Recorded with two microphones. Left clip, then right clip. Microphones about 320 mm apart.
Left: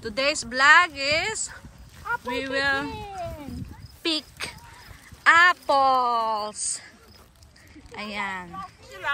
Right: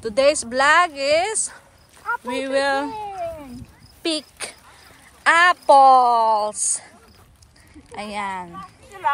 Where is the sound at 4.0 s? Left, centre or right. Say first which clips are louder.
Right 2 dB; centre.